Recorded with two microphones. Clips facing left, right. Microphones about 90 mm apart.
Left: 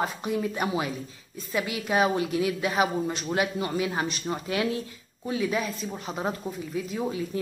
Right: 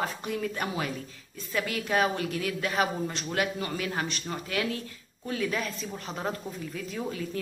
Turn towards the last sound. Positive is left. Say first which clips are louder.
# left 4 dB
turn(degrees=15)  # may be behind; listen again after turning